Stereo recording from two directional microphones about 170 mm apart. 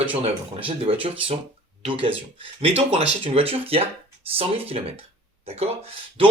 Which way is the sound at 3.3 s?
35° right (ahead or behind).